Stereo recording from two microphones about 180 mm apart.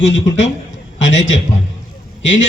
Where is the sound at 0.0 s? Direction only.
90° left.